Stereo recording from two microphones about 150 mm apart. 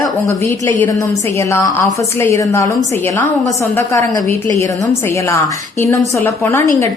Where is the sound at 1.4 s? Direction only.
20° left (ahead or behind).